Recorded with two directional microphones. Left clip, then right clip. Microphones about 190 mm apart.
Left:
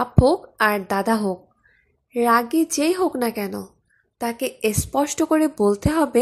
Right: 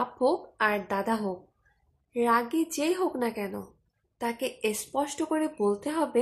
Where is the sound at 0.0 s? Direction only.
35° left (ahead or behind).